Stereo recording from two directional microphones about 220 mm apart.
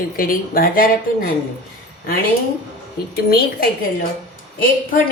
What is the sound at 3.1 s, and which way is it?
Speech, 45° left (ahead or behind).